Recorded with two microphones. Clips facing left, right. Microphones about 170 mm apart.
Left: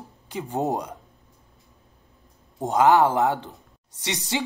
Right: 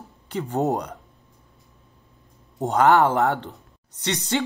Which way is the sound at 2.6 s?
15° left (ahead or behind).